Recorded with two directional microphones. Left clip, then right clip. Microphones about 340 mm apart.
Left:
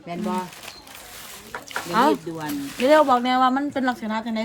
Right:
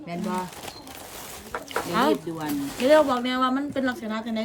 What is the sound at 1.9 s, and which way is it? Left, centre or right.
Speech, centre.